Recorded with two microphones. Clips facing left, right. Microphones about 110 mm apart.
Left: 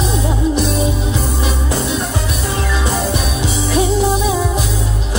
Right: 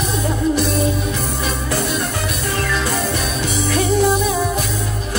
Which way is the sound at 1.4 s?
15° left (ahead or behind).